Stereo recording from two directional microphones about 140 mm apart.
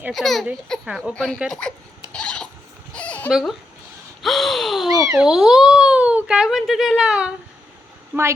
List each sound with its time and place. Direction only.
0.1 s a child's voice: centre (ahead or behind)
1.1 s a child's voice: 5° left (ahead or behind)
2.1 s a sound: 5° left (ahead or behind)
2.9 s fowl: 10° left (ahead or behind)
4.2 s a sound: centre (ahead or behind)
4.9 s a child's voice: 25° right (ahead or behind)
5.2 s a child's voice: 5° right (ahead or behind)
8.1 s speech: 15° right (ahead or behind)